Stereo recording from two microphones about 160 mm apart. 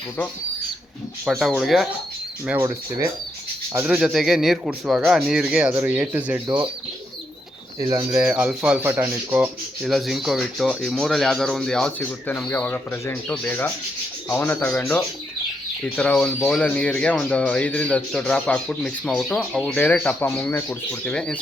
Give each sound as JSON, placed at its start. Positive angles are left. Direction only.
{"t": 1.2, "sound": "speech", "side_deg": 0}
{"t": 2.5, "sound": "speech", "side_deg": -15}
{"t": 7.8, "sound": "speech", "side_deg": -20}
{"t": 8.2, "sound": "speech", "side_deg": -10}